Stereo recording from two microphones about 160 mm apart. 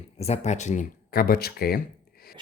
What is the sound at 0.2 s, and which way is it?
Speech, 45° left (ahead or behind).